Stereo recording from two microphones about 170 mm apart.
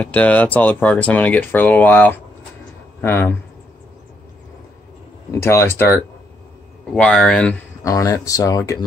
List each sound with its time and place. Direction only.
0.0 s speech: 10° left (ahead or behind)
5.3 s speech: 15° left (ahead or behind)
6.9 s speech: 5° left (ahead or behind)
7.8 s speech: 20° left (ahead or behind)